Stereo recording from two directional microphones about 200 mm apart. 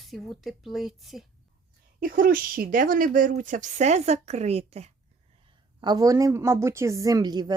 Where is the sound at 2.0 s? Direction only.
45° right (ahead or behind).